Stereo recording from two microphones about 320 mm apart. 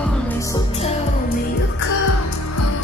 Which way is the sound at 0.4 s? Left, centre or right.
Centre.